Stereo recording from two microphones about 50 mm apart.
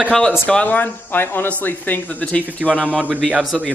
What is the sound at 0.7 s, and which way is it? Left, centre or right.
Speech, left.